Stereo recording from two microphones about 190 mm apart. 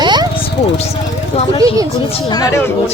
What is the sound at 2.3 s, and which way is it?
Speech, 20° left (ahead or behind).